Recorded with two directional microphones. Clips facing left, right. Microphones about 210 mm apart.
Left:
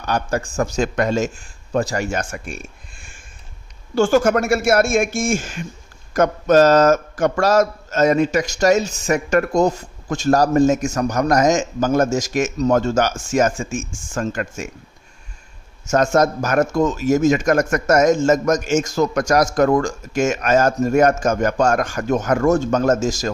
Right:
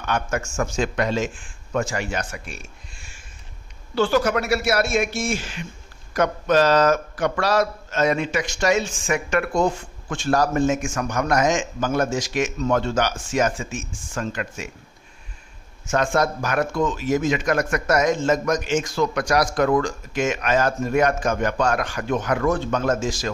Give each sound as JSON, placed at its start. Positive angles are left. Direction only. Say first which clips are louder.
{"t": 0.0, "sound": "a man's voice", "louder": "left 3 dB", "side_deg": 35}
{"t": 15.9, "sound": "a man's voice", "louder": "left 5 dB", "side_deg": 45}